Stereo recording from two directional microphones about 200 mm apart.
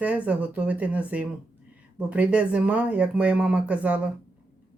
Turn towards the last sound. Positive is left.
turn(degrees=-5)  # may be behind; listen again after turning